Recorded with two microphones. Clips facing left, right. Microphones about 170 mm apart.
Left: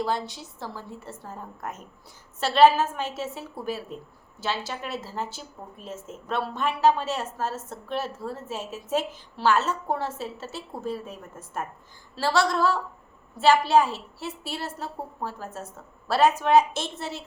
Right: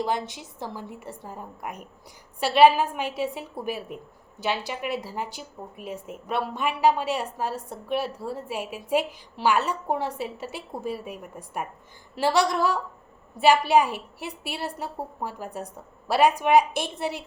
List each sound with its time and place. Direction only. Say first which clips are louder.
0.0 s a woman's voice: even; 20° right (ahead or behind)